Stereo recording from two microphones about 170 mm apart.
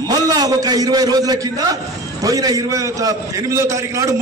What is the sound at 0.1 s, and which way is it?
A man's voice, 20° right (ahead or behind).